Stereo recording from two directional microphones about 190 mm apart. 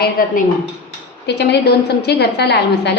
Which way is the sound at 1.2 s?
65° left (ahead or behind).